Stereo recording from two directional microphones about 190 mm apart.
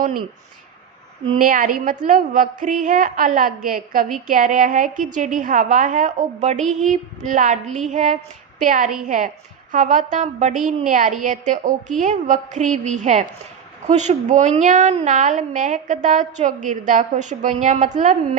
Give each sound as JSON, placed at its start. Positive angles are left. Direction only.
{"t": 0.0, "sound": "speech", "side_deg": -50}
{"t": 1.4, "sound": "a woman's voice", "side_deg": -45}